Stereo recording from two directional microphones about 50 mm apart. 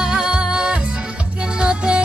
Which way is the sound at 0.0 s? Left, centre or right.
Centre.